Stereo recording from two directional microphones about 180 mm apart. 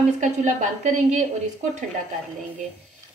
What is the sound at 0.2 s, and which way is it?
A woman's voice, 40° right (ahead or behind).